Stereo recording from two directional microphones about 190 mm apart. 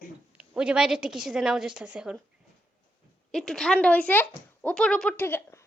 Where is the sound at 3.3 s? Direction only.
5° left (ahead or behind).